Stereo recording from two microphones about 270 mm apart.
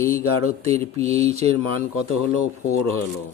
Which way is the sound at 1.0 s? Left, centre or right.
Right.